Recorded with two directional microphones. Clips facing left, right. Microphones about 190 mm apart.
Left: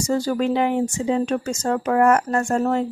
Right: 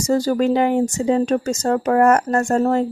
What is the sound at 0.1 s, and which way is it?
Speech, 40° right (ahead or behind).